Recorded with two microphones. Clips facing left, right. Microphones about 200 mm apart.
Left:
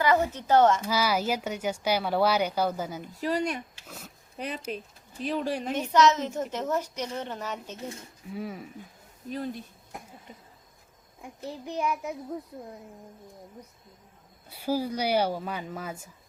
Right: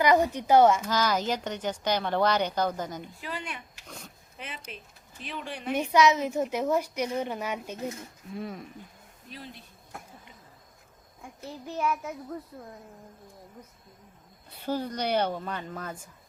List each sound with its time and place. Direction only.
0.0 s a woman's voice: 15° right (ahead or behind)
0.9 s a woman's voice: 10° left (ahead or behind)
3.1 s speech: 40° left (ahead or behind)
3.8 s speech: 5° left (ahead or behind)
4.4 s speech: 40° left (ahead or behind)
5.9 s a woman's voice: 10° right (ahead or behind)
8.3 s speech: 5° left (ahead or behind)
9.3 s speech: 45° left (ahead or behind)
9.9 s a sound: 15° left (ahead or behind)
11.2 s a woman's voice: 15° left (ahead or behind)
14.5 s a woman's voice: 10° left (ahead or behind)